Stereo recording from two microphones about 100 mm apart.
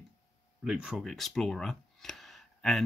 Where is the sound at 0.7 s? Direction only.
10° right (ahead or behind).